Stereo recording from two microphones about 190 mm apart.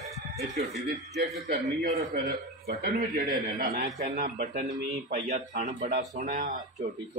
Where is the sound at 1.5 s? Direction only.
45° right (ahead or behind).